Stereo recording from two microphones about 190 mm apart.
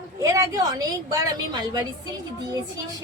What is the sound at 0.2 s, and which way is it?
A woman's voice, 15° right (ahead or behind).